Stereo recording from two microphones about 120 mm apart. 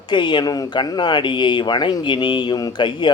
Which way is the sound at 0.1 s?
40° left (ahead or behind).